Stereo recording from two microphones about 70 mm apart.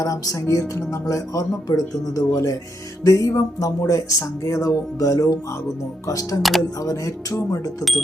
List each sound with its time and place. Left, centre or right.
0.0 s music: left
0.4 s speech: left
3.0 s music: left
3.8 s speech: left
6.1 s music: left
7.5 s speech: left